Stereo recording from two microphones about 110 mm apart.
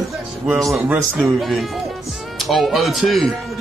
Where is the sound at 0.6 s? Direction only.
25° right (ahead or behind).